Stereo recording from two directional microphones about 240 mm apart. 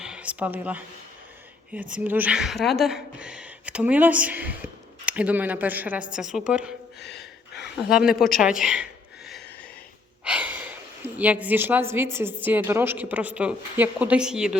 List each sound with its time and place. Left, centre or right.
0.0 s speech: centre
1.9 s speech: centre
7.0 s gasp: left
7.9 s speech: centre
10.2 s a woman's voice: centre